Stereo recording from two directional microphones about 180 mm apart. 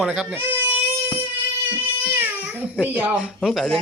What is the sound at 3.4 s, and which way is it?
Speech, centre (ahead or behind).